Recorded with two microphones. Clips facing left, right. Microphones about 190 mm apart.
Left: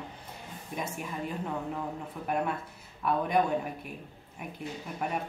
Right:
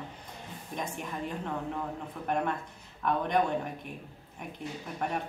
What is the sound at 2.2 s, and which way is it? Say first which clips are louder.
A woman's voice: even; 5° left (ahead or behind).